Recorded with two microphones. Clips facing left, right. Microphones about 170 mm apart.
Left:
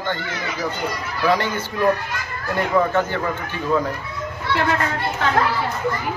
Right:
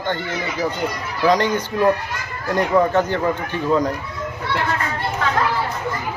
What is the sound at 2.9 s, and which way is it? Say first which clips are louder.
Speech: right 2 dB; 15° right (ahead or behind).